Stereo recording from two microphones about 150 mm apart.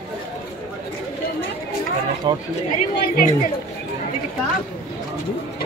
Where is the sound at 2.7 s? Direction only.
75° left (ahead or behind).